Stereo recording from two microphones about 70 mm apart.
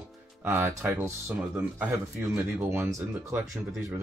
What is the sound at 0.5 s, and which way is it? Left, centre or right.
Speech, right.